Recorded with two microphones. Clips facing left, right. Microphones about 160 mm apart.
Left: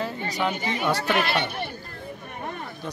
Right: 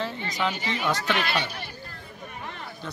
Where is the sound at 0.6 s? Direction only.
50° left (ahead or behind).